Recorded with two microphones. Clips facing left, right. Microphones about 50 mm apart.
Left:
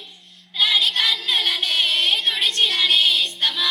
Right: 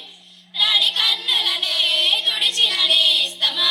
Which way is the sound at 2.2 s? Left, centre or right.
Left.